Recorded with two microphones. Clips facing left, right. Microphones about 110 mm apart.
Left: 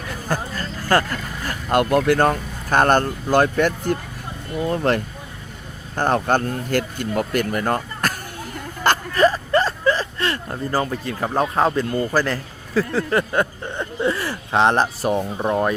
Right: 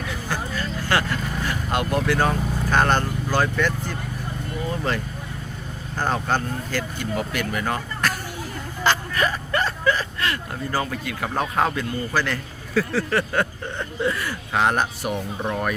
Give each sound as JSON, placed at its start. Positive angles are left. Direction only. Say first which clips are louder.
{"t": 0.1, "sound": "vehicle", "louder": "left 5 dB", "side_deg": 45}
{"t": 3.5, "sound": "speech", "louder": "left 5 dB", "side_deg": 50}
{"t": 4.6, "sound": "speech", "louder": "left 7 dB", "side_deg": 65}
{"t": 6.0, "sound": "speech", "louder": "left 5 dB", "side_deg": 55}
{"t": 9.1, "sound": "a sound", "louder": "left 7 dB", "side_deg": 35}
{"t": 10.9, "sound": "speech", "louder": "left 4 dB", "side_deg": 35}
{"t": 11.9, "sound": "a man's voice", "louder": "left 4 dB", "side_deg": 40}